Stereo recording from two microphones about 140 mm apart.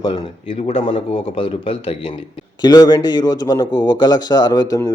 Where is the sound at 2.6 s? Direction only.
30° left (ahead or behind).